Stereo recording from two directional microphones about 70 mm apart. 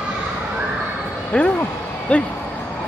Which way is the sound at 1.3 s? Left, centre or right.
Centre.